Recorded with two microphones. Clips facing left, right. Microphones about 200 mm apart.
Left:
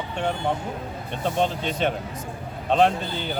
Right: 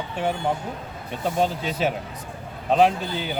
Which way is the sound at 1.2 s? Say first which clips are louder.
Right 1 dB; 5° right (ahead or behind).